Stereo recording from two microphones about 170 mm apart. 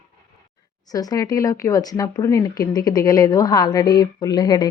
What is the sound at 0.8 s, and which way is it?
Speech, 20° left (ahead or behind).